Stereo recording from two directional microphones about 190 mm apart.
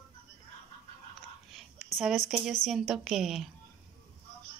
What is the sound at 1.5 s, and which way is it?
Whispering, centre (ahead or behind).